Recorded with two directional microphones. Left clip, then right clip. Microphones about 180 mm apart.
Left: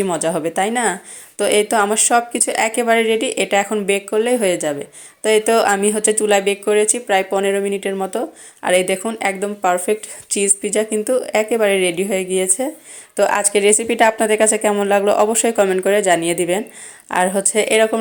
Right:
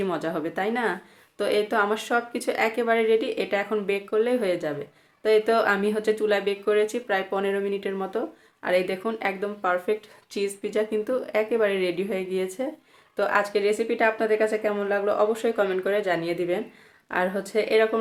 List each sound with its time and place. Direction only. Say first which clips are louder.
0.0 s a woman's voice: left 8 dB; 25° left (ahead or behind)